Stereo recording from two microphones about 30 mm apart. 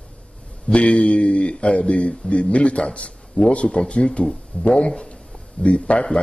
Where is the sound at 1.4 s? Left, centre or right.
Left.